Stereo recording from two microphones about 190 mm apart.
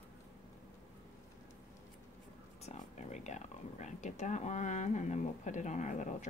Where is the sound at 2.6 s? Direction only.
35° left (ahead or behind).